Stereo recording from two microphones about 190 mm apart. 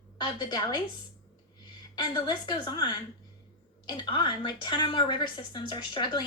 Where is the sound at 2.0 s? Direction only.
25° left (ahead or behind).